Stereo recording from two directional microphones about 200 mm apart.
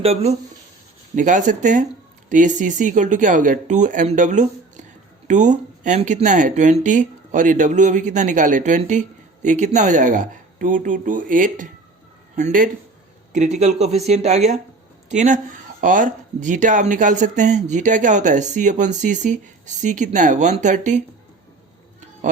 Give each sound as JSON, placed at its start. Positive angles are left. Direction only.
{"t": 0.0, "sound": "speech", "side_deg": -30}